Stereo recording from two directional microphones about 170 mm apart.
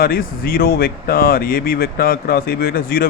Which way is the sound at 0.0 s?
60° left (ahead or behind).